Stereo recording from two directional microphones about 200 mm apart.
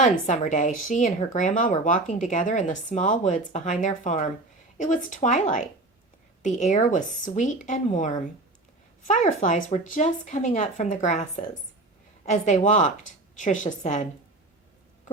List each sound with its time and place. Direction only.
0.0 s a woman's voice: 40° left (ahead or behind)
9.2 s a woman's voice: 40° left (ahead or behind)